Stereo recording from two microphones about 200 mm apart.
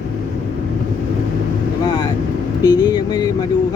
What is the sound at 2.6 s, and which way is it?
Speech, 20° left (ahead or behind).